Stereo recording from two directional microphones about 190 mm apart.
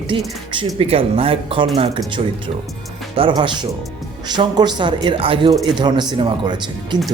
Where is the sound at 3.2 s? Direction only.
25° right (ahead or behind).